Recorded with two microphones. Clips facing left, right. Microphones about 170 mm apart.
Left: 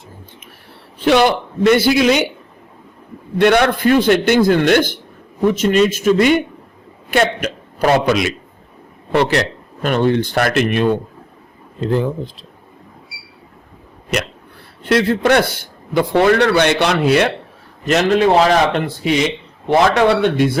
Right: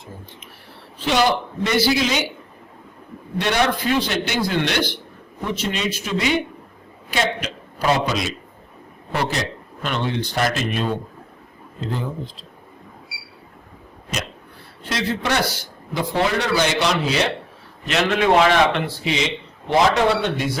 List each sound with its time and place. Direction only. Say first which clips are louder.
0.9 s a man's voice: left 6 dB; 60° left (ahead or behind)
3.3 s a man's voice: left 8 dB; 55° left (ahead or behind)
9.8 s a man's voice: left 9 dB; 50° left (ahead or behind); by 12.5 s 65° left (ahead or behind)
14.1 s a man's voice: left 8 dB; 65° left (ahead or behind)
17.8 s a man's voice: left 5 dB; 40° left (ahead or behind)
19.8 s a man's voice: left 5 dB; 60° left (ahead or behind)